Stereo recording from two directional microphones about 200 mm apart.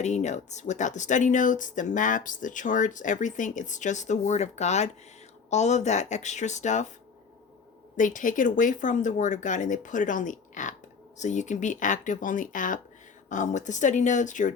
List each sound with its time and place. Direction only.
0.0 s speech: 35° left (ahead or behind)
7.9 s speech: 40° left (ahead or behind)